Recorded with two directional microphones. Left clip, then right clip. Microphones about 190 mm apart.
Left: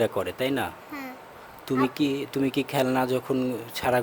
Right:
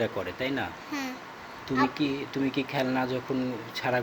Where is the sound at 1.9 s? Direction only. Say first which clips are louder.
Left 3 dB; 60° left (ahead or behind).